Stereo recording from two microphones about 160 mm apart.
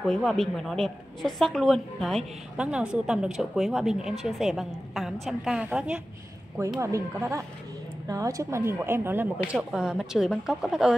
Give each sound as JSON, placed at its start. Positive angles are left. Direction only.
{"t": 0.0, "sound": "a woman's voice", "side_deg": 0}
{"t": 6.8, "sound": "a woman's voice", "side_deg": -20}